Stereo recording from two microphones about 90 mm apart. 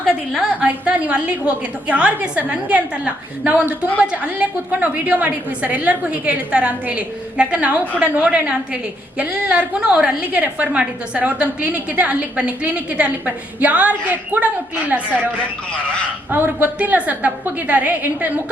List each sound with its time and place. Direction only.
0.6 s a woman's voice: 15° right (ahead or behind)
16.3 s a woman's voice: 20° right (ahead or behind)